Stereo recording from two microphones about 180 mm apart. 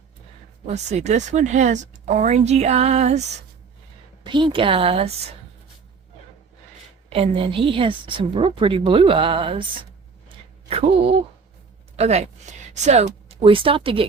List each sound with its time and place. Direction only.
0.7 s speech: 40° right (ahead or behind)
4.2 s a woman's voice: 25° right (ahead or behind)
7.1 s a woman's voice: 30° right (ahead or behind)
10.2 s a sound: 30° right (ahead or behind)
11.9 s speech: 40° right (ahead or behind)